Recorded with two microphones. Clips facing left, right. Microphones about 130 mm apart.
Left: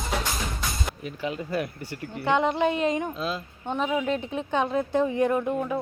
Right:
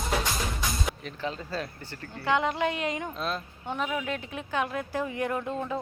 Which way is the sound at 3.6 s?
20° left (ahead or behind).